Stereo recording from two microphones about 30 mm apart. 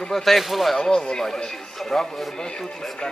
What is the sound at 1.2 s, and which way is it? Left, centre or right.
Speech, centre.